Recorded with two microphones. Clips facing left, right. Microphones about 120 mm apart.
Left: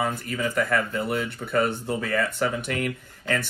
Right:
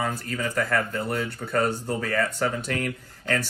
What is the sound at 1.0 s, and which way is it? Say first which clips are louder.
Speech: left 1 dB; 5° left (ahead or behind).